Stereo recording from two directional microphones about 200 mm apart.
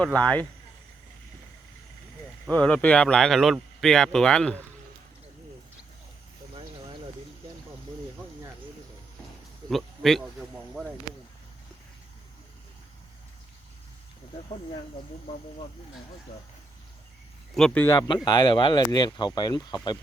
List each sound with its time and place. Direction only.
0.0 s speech: 5° left (ahead or behind)
2.5 s speech: 5° left (ahead or behind)
9.6 s a sound: centre (ahead or behind)
17.5 s speech: centre (ahead or behind)
17.8 s speech: 15° left (ahead or behind)